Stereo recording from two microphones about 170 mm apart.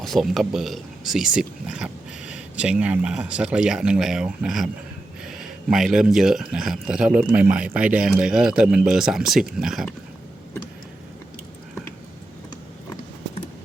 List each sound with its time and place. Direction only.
0.0 s speech: centre (ahead or behind)